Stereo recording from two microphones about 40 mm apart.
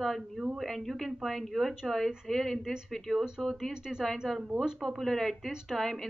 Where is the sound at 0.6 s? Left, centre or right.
Centre.